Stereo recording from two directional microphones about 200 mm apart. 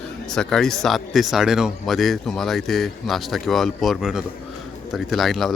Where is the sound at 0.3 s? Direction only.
Centre (ahead or behind).